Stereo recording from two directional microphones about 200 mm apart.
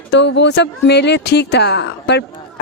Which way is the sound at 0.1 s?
60° left (ahead or behind).